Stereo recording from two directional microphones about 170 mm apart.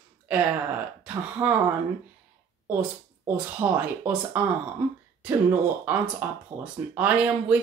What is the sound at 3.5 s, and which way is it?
Speech, 10° right (ahead or behind).